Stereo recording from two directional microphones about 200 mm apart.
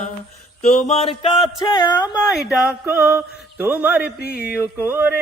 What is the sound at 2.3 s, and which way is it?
Speech, 5° right (ahead or behind).